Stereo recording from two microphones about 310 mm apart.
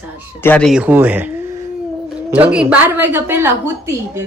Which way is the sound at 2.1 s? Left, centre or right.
Centre.